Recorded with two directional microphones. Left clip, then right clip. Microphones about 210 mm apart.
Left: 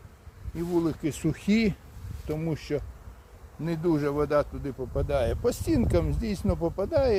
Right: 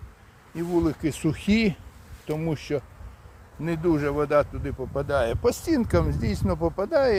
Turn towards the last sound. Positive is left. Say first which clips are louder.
# right 3 dB
turn(degrees=-15)  # may be behind; listen again after turning